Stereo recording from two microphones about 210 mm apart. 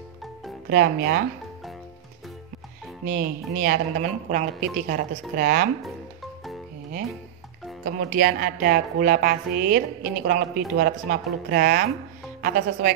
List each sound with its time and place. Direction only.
0.7 s speech: 50° right (ahead or behind)
3.1 s speech: 45° right (ahead or behind)
4.0 s speech: 35° right (ahead or behind)
7.8 s speech: 45° right (ahead or behind)